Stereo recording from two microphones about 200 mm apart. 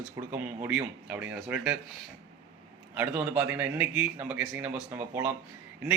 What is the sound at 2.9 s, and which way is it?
Speech, 10° right (ahead or behind).